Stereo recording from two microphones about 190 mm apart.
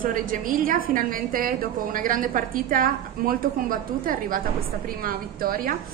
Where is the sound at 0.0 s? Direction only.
45° right (ahead or behind).